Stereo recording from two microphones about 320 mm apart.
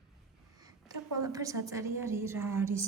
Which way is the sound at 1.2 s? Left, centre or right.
Centre.